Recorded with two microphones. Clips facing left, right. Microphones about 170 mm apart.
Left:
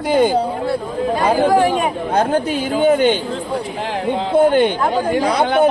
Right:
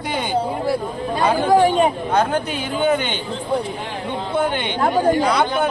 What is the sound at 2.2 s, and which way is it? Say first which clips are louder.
Speech: left 5 dB; 40° left (ahead or behind).